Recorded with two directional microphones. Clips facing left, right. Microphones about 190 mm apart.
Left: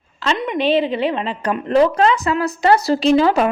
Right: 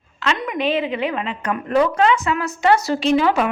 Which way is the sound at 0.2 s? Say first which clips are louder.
Left 2 dB; 30° left (ahead or behind).